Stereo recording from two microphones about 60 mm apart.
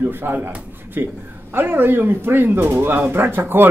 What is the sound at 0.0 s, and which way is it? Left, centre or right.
A man's voice, right.